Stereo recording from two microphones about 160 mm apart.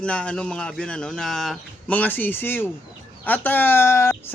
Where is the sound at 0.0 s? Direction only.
5° left (ahead or behind).